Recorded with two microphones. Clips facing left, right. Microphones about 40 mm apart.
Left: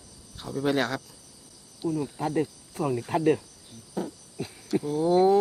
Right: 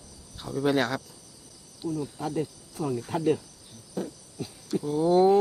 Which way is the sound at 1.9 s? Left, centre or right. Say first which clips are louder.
Left 3 dB; left.